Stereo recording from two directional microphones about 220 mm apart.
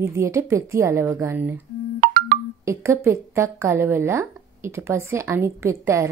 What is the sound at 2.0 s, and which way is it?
Music, 45° right (ahead or behind).